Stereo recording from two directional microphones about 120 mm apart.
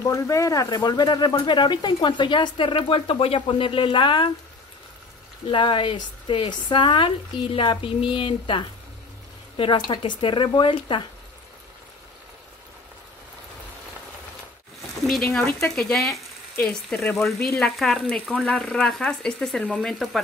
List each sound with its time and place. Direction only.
0.0 s speech: 25° left (ahead or behind); by 4.3 s 45° left (ahead or behind)
5.5 s speech: 45° left (ahead or behind)
15.0 s speech: centre (ahead or behind)
16.5 s speech: 15° left (ahead or behind)
17.1 s speech: 5° left (ahead or behind)
18.1 s speech: 10° left (ahead or behind)